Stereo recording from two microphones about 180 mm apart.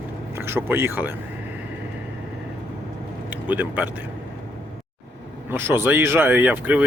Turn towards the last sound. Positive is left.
turn(degrees=-10)  # may be behind; listen again after turning